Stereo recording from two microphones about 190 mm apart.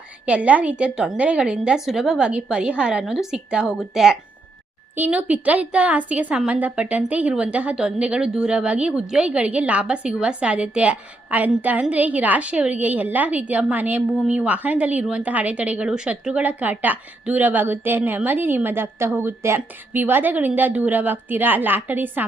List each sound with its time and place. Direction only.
0.3 s a woman's voice: 5° right (ahead or behind)